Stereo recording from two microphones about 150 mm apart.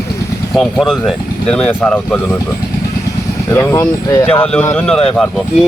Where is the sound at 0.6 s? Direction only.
Centre (ahead or behind).